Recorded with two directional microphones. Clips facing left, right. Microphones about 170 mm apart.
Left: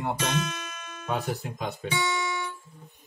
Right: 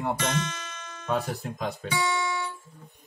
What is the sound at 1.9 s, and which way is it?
Music, 25° left (ahead or behind).